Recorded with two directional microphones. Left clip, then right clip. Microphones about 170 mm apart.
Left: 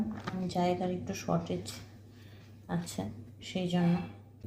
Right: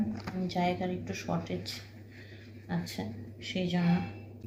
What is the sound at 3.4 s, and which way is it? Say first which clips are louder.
Speech: right 1 dB; 40° left (ahead or behind).